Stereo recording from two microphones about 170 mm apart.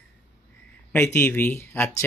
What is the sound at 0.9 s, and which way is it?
Speech, 15° left (ahead or behind).